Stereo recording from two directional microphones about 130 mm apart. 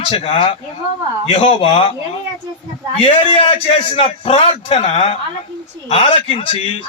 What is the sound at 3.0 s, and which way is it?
A man's voice, 45° left (ahead or behind).